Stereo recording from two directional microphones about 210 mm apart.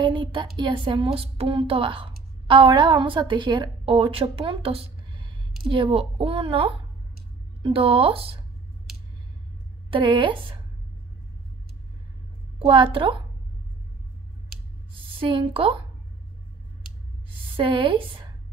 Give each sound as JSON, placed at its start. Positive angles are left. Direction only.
{"t": 0.0, "sound": "a sound", "side_deg": -25}
{"t": 0.6, "sound": "a woman's voice", "side_deg": -20}
{"t": 9.8, "sound": "a woman's voice", "side_deg": -25}
{"t": 12.5, "sound": "a woman's voice", "side_deg": -25}
{"t": 15.1, "sound": "a woman's voice", "side_deg": -25}
{"t": 17.6, "sound": "a woman's voice", "side_deg": -25}